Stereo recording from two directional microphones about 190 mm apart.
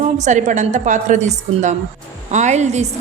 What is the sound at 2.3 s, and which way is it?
Speech, 40° right (ahead or behind).